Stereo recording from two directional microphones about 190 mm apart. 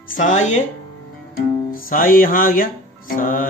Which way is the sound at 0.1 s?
40° left (ahead or behind).